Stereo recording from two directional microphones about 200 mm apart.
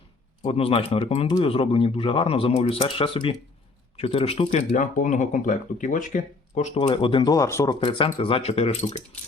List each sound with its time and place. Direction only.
0.4 s speech: 30° left (ahead or behind)
6.8 s speech: 25° left (ahead or behind)